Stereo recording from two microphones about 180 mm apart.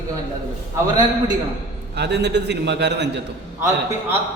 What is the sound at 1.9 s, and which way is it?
A man's voice, 70° right (ahead or behind).